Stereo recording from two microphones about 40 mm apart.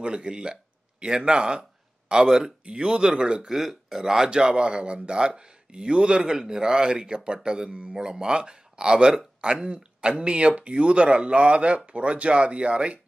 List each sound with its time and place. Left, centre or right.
0.0 s speech: right
3.4 s speech: centre; by 13.0 s right